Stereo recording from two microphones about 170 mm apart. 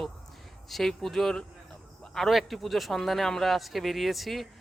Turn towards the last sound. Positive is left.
turn(degrees=0)  # may be behind; listen again after turning